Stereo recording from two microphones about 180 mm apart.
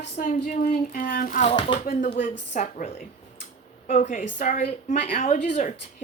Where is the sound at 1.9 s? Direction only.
50° left (ahead or behind).